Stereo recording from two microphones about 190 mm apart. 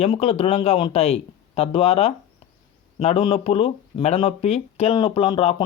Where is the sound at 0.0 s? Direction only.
30° left (ahead or behind).